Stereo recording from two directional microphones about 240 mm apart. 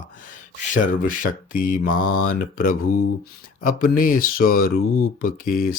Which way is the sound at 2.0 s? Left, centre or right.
Left.